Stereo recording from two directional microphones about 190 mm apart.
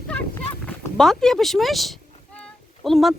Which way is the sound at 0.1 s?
5° left (ahead or behind).